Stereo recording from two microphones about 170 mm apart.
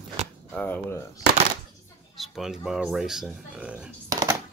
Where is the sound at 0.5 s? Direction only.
10° left (ahead or behind).